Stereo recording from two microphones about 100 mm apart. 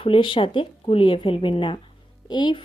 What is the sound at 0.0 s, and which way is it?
Speech, 60° left (ahead or behind).